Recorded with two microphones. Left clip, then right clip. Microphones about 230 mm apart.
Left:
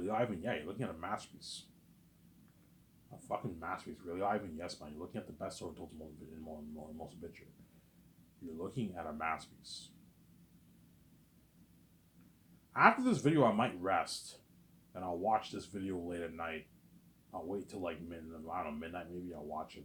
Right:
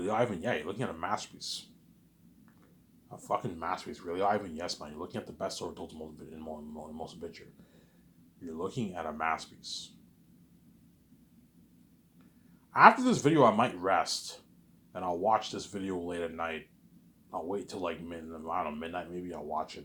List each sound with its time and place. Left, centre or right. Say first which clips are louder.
0.0 s speech: right 6 dB; right
3.2 s speech: right 7 dB; right
6.9 s speech: right 7 dB; centre
8.5 s speech: right 6 dB; centre
12.7 s speech: right 8 dB; centre